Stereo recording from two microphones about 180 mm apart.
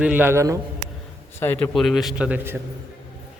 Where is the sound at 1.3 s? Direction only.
10° left (ahead or behind); by 2.5 s 5° right (ahead or behind).